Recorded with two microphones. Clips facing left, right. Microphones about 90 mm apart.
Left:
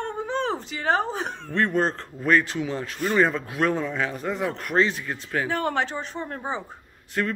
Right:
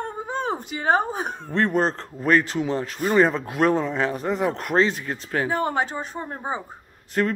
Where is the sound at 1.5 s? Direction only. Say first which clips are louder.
Right 2 dB; 30° right (ahead or behind).